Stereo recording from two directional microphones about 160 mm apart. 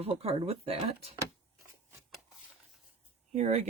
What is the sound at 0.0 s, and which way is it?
Speech, 40° right (ahead or behind).